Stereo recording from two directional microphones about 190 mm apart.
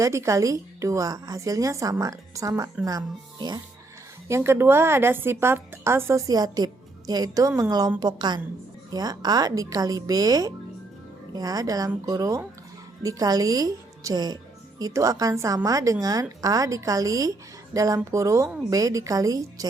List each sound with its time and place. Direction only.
0.0 s a woman's voice: 15° right (ahead or behind)